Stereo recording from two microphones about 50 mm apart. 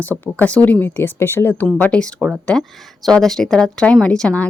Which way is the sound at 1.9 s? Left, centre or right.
Left.